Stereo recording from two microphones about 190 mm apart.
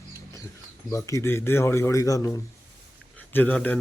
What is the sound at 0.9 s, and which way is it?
Speech, 15° left (ahead or behind).